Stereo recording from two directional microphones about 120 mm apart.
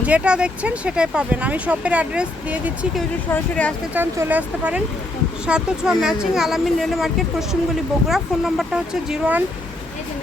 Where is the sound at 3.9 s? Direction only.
15° right (ahead or behind).